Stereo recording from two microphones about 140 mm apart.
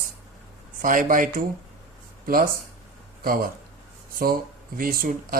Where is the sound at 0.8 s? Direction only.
75° right (ahead or behind).